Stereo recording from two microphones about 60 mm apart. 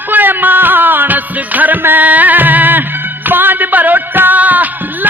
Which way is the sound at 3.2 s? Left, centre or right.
Right.